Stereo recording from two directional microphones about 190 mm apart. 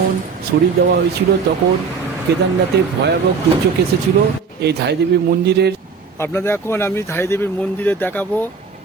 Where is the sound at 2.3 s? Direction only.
60° right (ahead or behind).